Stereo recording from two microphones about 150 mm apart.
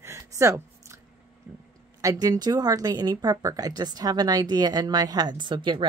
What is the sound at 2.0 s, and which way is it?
Speech, 20° right (ahead or behind).